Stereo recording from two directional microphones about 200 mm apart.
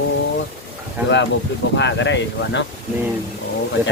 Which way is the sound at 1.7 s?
65° left (ahead or behind).